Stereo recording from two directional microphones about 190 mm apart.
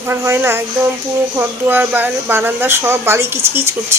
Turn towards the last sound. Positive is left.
turn(degrees=-15)  # may be behind; listen again after turning